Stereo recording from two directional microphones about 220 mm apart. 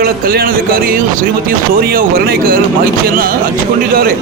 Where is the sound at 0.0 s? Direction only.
40° right (ahead or behind).